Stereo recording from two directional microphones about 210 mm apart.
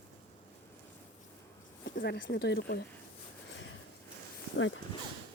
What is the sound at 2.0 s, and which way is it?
Speech, 50° left (ahead or behind).